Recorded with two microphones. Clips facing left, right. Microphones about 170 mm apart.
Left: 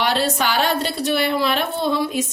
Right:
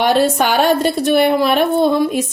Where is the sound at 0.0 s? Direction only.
50° right (ahead or behind).